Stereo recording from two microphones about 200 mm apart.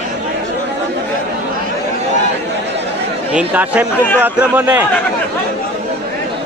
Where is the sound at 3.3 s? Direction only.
5° right (ahead or behind).